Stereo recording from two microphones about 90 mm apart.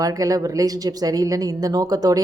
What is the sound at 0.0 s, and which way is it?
Speech, 40° right (ahead or behind).